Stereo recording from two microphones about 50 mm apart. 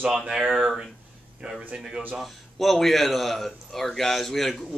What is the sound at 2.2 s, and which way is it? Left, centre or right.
Speech, centre.